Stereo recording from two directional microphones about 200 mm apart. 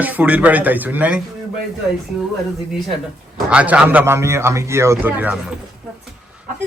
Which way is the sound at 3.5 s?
5° right (ahead or behind).